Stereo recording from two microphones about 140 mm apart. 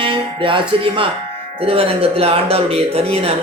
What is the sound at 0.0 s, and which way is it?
Music, 40° right (ahead or behind).